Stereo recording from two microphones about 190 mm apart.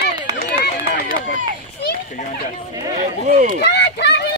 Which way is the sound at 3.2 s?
40° right (ahead or behind).